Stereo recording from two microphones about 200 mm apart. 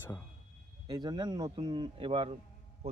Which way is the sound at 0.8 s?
20° right (ahead or behind).